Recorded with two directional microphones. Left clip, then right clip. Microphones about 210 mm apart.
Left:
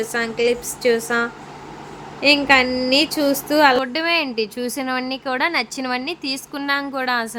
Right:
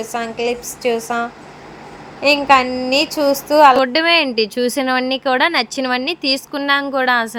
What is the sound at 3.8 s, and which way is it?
Speech, 20° right (ahead or behind).